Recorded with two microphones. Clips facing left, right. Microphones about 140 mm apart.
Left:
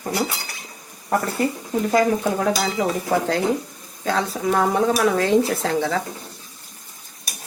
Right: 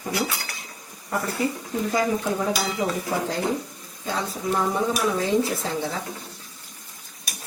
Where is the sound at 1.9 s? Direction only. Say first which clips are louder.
Left 5 dB; 70° left (ahead or behind).